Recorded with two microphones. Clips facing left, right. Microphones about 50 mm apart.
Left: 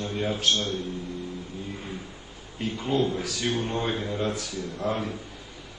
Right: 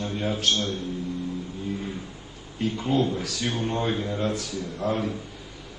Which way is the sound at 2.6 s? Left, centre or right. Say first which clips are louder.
Right 2 dB; centre.